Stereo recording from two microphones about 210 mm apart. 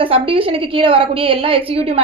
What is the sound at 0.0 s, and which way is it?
A woman's voice, 25° right (ahead or behind).